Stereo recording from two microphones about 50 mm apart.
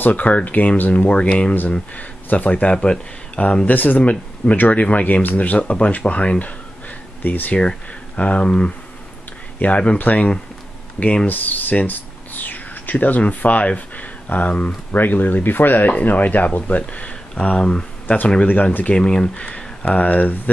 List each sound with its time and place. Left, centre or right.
0.0 s speech: left
11.2 s a sound: left
14.9 s speech: left; by 17.8 s centre
18.0 s speech: left
18.9 s speech: centre; by 20.3 s left